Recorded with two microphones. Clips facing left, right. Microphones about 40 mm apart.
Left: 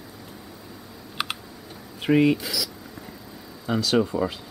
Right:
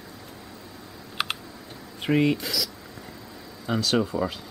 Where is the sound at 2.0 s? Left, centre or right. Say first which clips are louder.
Left 3 dB; centre.